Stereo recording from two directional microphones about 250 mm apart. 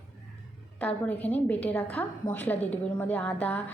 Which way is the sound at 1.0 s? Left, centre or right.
Centre.